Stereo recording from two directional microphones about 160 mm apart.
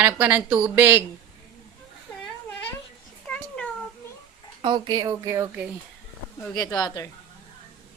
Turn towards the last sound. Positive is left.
turn(degrees=25)  # may be behind; listen again after turning